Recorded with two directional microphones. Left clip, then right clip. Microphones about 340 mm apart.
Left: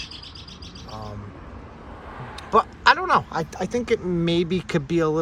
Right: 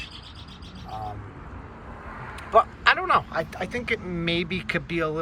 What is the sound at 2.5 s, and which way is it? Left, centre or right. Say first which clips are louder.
Speech: left 2 dB; centre.